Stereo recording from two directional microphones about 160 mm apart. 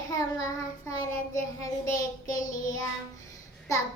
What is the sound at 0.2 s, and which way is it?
Child singing, 20° left (ahead or behind).